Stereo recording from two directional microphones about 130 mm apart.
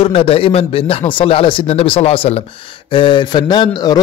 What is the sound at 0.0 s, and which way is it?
Speech, 45° left (ahead or behind).